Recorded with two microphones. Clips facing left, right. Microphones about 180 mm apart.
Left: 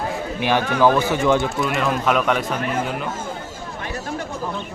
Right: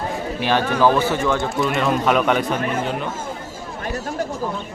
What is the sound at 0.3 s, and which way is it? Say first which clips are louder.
A man's voice: even; 15° left (ahead or behind).